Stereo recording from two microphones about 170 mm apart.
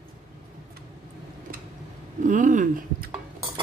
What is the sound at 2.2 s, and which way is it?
Speech, 50° right (ahead or behind).